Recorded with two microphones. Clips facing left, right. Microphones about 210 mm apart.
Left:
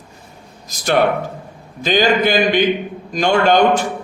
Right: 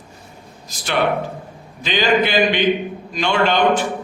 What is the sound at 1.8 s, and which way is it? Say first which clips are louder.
A man's voice: left 3 dB; 45° left (ahead or behind).